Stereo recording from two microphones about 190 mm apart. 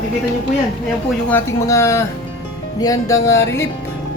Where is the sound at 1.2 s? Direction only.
10° left (ahead or behind).